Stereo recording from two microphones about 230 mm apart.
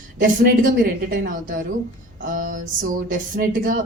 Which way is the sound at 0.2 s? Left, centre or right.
Right.